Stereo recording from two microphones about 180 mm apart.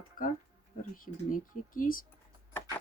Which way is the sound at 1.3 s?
50° left (ahead or behind).